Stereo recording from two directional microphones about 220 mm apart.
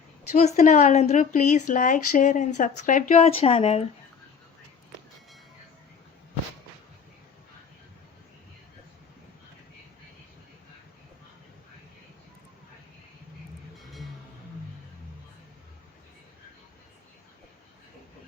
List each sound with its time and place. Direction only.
0.3 s speech: 30° left (ahead or behind)